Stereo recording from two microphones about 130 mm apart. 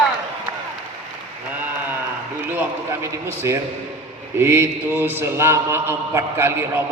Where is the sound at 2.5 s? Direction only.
20° right (ahead or behind).